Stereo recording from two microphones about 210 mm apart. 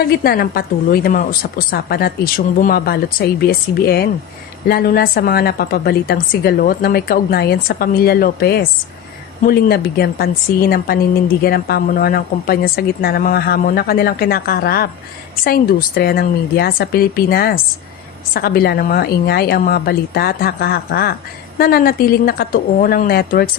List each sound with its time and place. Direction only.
0.0 s a woman's voice: 45° left (ahead or behind)